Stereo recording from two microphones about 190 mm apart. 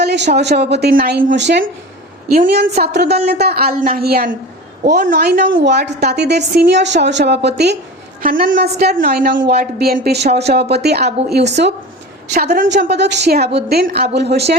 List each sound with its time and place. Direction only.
0.0 s a sound: 60° right (ahead or behind)
0.3 s a woman's voice: 60° right (ahead or behind)
2.3 s a woman's voice: 45° right (ahead or behind)
8.2 s a woman's voice: 45° right (ahead or behind)